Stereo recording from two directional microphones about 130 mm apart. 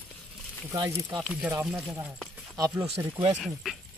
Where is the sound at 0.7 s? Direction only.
30° right (ahead or behind).